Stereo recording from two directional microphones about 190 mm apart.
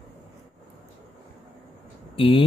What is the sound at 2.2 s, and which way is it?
Speech, 25° left (ahead or behind).